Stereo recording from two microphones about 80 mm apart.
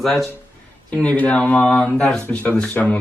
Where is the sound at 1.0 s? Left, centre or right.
Centre.